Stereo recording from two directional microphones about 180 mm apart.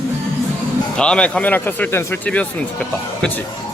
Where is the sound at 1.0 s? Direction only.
5° left (ahead or behind).